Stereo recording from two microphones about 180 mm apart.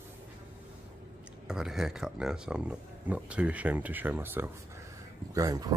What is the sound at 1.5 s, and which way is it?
Speech, 5° right (ahead or behind).